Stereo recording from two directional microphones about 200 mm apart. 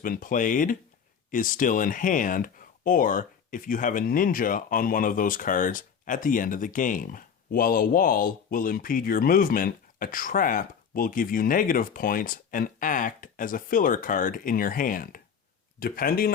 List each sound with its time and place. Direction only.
0.0 s speech: 45° left (ahead or behind)